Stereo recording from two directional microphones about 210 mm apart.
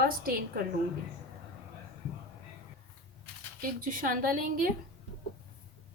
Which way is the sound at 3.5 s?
40° right (ahead or behind).